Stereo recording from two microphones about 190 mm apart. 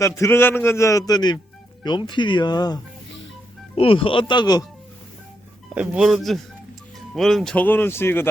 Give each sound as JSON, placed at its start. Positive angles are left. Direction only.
{"t": 0.2, "sound": "a man's voice", "side_deg": 10}
{"t": 5.7, "sound": "a man's voice", "side_deg": -5}